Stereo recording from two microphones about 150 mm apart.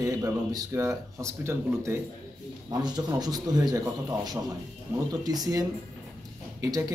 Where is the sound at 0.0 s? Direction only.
20° right (ahead or behind).